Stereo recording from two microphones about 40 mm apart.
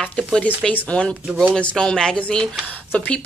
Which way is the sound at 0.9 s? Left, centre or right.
Left.